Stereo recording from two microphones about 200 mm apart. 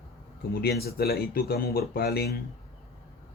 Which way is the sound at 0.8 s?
50° left (ahead or behind).